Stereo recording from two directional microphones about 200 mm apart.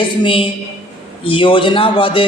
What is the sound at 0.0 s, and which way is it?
A man's voice, 25° left (ahead or behind).